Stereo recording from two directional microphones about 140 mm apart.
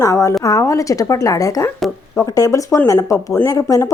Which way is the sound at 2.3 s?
25° left (ahead or behind).